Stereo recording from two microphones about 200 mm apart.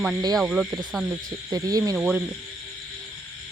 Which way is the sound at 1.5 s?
20° right (ahead or behind).